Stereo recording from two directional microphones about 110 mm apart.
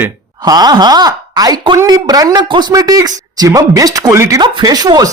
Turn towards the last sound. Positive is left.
turn(degrees=-35)  # may be behind; listen again after turning